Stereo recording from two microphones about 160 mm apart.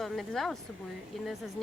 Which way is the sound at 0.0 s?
Centre (ahead or behind).